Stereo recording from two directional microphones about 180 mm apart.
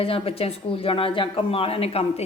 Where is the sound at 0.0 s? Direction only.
30° left (ahead or behind).